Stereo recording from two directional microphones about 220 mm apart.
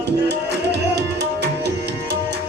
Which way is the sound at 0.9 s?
50° right (ahead or behind).